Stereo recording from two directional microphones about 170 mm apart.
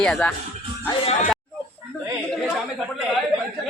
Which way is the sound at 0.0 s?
5° left (ahead or behind).